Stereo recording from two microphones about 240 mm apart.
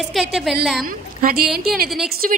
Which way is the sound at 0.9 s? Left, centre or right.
Right.